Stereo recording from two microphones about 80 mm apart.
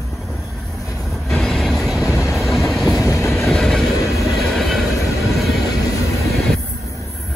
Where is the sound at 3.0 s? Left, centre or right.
Left.